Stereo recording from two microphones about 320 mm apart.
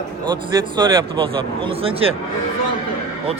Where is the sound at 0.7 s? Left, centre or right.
Centre.